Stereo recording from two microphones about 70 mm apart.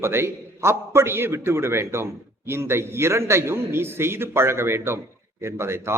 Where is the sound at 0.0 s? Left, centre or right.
Right.